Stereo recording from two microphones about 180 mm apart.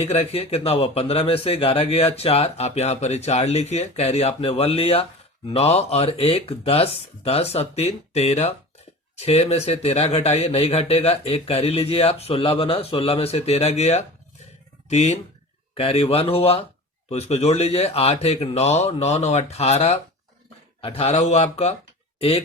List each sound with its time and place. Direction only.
0.0 s speech: 35° left (ahead or behind)